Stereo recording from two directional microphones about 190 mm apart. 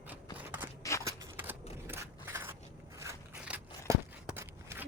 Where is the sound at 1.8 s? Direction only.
10° right (ahead or behind).